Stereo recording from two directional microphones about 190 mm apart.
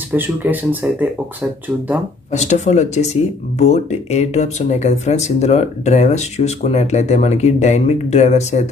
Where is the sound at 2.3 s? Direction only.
35° left (ahead or behind).